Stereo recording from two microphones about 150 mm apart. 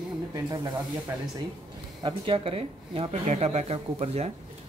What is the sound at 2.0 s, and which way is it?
Speech, 35° right (ahead or behind).